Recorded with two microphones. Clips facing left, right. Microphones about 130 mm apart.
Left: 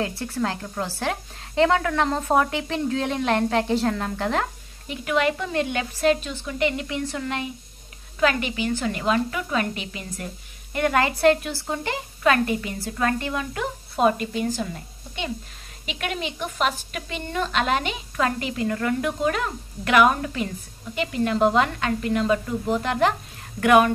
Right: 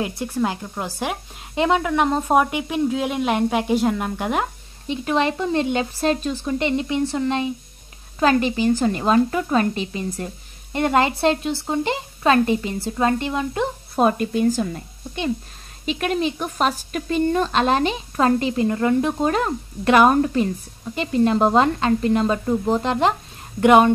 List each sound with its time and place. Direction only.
0.0 s speech: 15° right (ahead or behind)
4.8 s a woman's voice: 30° right (ahead or behind)
13.9 s speech: 45° right (ahead or behind)
15.8 s a woman's voice: 35° right (ahead or behind)